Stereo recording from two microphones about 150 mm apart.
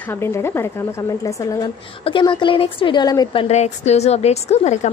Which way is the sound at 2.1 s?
35° left (ahead or behind).